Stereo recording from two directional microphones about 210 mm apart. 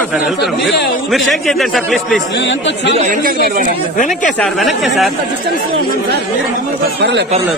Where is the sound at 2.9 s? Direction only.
35° right (ahead or behind).